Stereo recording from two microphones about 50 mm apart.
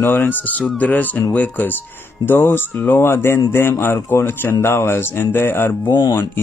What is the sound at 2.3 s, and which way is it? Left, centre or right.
Speech, left.